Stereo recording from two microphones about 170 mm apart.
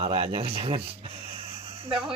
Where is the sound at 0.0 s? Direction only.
35° right (ahead or behind).